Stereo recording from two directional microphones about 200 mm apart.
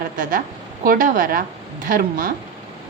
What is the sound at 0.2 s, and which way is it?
A woman's voice, 45° right (ahead or behind).